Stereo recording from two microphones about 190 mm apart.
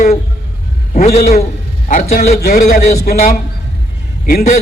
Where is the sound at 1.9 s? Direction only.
40° left (ahead or behind).